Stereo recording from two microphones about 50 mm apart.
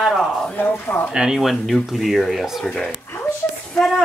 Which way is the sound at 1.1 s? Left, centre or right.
Centre.